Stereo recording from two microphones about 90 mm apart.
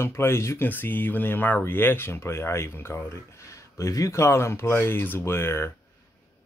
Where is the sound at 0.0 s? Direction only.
25° left (ahead or behind).